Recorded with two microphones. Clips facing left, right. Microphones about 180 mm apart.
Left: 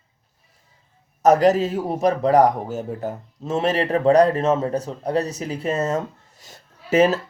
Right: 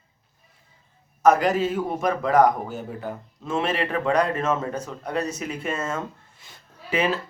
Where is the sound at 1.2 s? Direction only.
40° left (ahead or behind).